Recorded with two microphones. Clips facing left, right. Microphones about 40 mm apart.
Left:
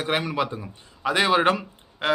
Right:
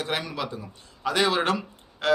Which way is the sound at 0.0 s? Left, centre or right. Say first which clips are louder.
Left 5 dB; left.